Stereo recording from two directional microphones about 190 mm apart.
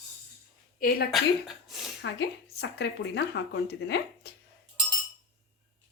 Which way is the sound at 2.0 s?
65° left (ahead or behind).